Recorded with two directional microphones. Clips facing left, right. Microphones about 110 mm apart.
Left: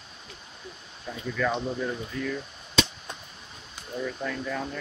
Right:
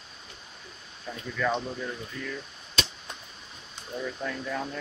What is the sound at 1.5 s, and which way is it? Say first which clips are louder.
Speech: left 2 dB; 25° left (ahead or behind).